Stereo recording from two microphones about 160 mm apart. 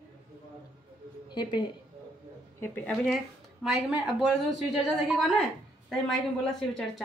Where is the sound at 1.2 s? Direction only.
30° left (ahead or behind).